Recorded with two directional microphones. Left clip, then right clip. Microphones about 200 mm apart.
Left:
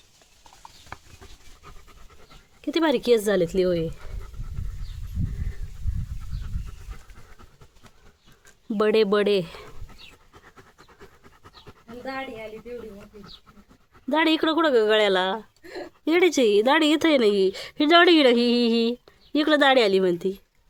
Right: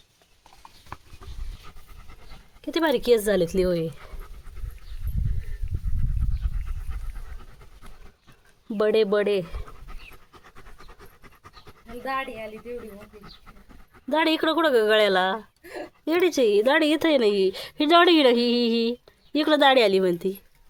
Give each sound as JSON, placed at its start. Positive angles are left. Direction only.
{"t": 2.6, "sound": "a woman's voice", "side_deg": 10}
{"t": 8.8, "sound": "speech", "side_deg": 10}
{"t": 10.8, "sound": "pant", "side_deg": 5}
{"t": 12.0, "sound": "speech", "side_deg": -55}
{"t": 14.1, "sound": "a woman's voice", "side_deg": 5}